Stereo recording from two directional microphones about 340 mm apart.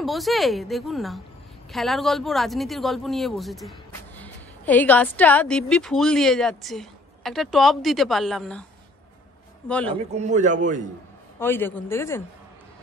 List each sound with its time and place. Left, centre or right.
0.0 s a woman's voice: centre
9.7 s a woman's voice: centre
9.9 s a man's voice: centre
11.3 s speech: centre